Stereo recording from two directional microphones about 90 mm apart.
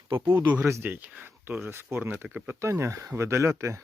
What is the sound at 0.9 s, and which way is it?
Speech, 20° right (ahead or behind).